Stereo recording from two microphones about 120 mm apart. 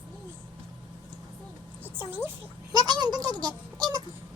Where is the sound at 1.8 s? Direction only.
15° right (ahead or behind).